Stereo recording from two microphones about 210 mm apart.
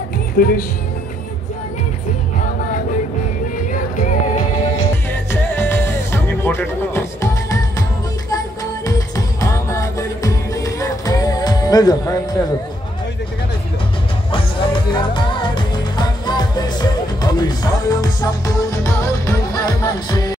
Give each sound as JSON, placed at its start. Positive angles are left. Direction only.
{"t": 0.4, "sound": "speech", "side_deg": 45}
{"t": 4.0, "sound": "music", "side_deg": 35}
{"t": 5.3, "sound": "music", "side_deg": 10}
{"t": 8.8, "sound": "music", "side_deg": 15}
{"t": 14.3, "sound": "music", "side_deg": 20}